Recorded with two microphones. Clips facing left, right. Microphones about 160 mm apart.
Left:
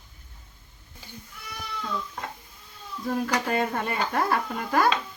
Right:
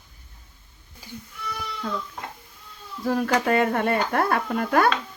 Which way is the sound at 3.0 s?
70° right (ahead or behind).